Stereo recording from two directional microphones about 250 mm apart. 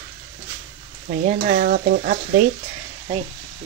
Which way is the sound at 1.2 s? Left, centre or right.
Right.